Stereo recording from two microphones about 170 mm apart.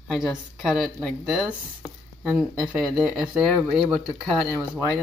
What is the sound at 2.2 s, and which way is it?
Speech, 5° right (ahead or behind).